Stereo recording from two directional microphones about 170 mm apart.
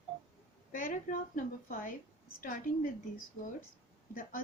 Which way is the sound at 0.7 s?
55° left (ahead or behind).